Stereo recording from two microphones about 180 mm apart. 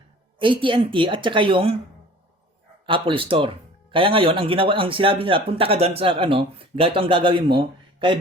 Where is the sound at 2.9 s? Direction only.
30° right (ahead or behind).